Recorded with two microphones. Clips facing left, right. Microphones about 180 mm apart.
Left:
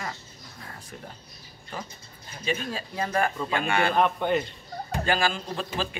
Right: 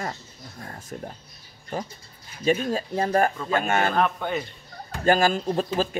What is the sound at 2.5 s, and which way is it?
A man's voice, 45° right (ahead or behind).